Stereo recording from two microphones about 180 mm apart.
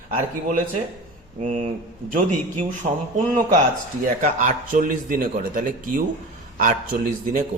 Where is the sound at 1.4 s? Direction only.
45° right (ahead or behind).